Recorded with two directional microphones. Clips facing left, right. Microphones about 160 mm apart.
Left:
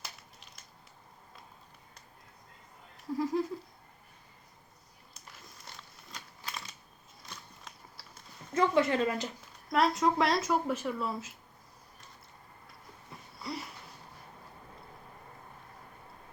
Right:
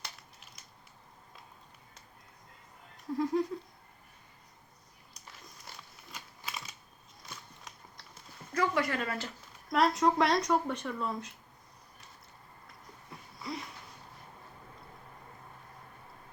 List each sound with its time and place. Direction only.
0.0 s crushing: centre (ahead or behind)
3.1 s speech: centre (ahead or behind)
5.5 s crumpling: 5° right (ahead or behind)
7.3 s biting: centre (ahead or behind)
8.5 s speech: 25° left (ahead or behind)
9.6 s speech: centre (ahead or behind)
13.4 s a sound: 5° left (ahead or behind)